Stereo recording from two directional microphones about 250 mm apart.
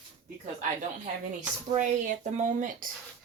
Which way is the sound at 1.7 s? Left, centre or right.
Right.